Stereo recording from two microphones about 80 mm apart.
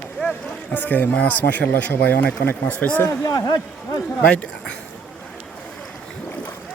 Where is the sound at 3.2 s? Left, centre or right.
Left.